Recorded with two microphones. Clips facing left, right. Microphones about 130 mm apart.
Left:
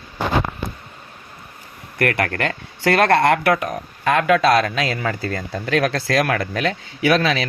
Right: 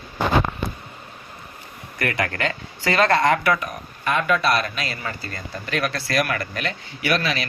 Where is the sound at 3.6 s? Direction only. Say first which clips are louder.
Left 5 dB; 90° left.